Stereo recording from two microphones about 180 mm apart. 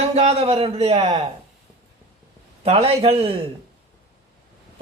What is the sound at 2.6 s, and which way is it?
Speech, 35° right (ahead or behind).